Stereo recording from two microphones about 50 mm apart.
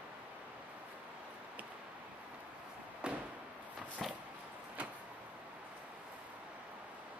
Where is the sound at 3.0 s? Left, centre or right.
Centre.